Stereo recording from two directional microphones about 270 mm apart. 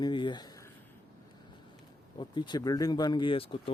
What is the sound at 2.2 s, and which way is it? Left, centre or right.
Speech, centre.